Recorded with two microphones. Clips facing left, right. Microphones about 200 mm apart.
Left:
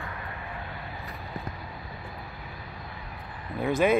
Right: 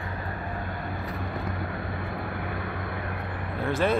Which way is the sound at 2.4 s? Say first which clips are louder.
Right 10 dB; 65° right (ahead or behind).